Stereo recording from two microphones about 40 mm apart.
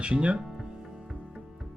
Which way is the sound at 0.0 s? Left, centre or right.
Right.